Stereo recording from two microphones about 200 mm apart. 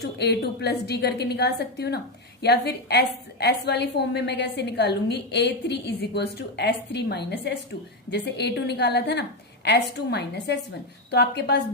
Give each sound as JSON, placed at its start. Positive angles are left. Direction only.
{"t": 0.0, "sound": "a woman's voice", "side_deg": 55}